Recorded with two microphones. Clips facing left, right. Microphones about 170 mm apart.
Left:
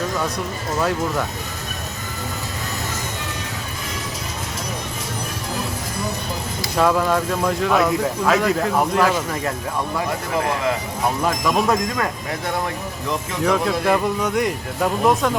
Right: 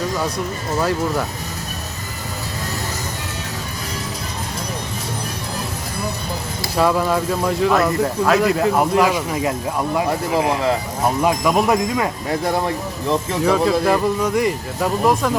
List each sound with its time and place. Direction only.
0.8 s speech: centre (ahead or behind)
6.7 s speech: 5° right (ahead or behind)
11.2 s speech: 10° right (ahead or behind)
12.5 s speech: 30° right (ahead or behind)
13.4 s speech: centre (ahead or behind)